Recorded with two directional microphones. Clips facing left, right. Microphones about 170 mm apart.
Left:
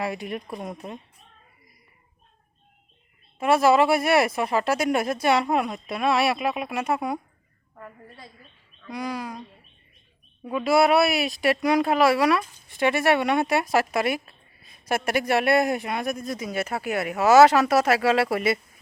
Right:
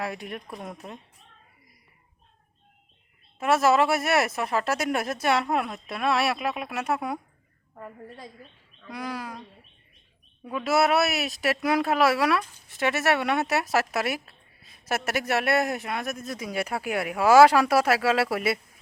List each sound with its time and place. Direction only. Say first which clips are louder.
0.0 s speech: left 4 dB; centre (ahead or behind)
3.4 s speech: left 3 dB; centre (ahead or behind)
7.8 s a woman's voice: right 3 dB; 20° right (ahead or behind)
8.9 s speech: left 3 dB; 5° right (ahead or behind)
10.6 s speech: left 3 dB; centre (ahead or behind)